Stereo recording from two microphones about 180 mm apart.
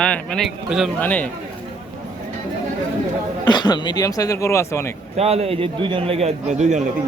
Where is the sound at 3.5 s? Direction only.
25° left (ahead or behind).